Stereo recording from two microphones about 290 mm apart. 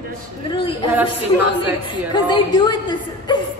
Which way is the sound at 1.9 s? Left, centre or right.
Centre.